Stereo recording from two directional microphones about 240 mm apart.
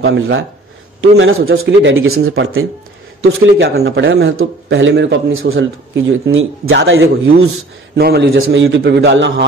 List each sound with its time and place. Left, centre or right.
0.0 s a man's voice: right
8.3 s a man's voice: right